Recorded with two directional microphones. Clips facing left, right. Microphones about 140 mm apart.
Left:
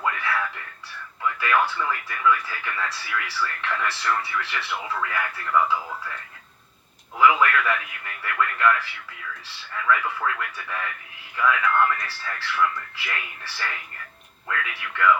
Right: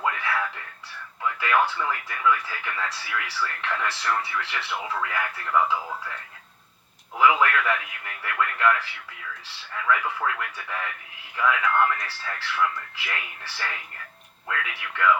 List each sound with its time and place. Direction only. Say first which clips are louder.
0.0 s music: even; 25° right (ahead or behind)
1.2 s speech: even; 25° right (ahead or behind)
7.2 s a man's voice: left 1 dB; 20° right (ahead or behind)